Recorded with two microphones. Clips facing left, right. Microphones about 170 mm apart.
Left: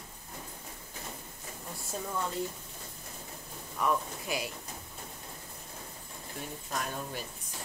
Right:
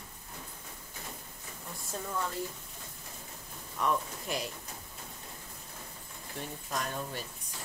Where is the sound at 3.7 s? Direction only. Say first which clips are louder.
Left 1 dB; 5° left (ahead or behind).